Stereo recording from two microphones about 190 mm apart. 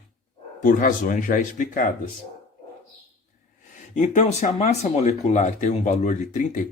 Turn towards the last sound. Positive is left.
turn(degrees=40)  # may be behind; listen again after turning